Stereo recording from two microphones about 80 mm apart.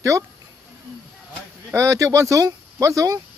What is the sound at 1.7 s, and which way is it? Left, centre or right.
Speech, right.